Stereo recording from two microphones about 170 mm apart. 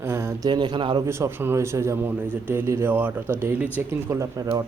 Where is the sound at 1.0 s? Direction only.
15° right (ahead or behind).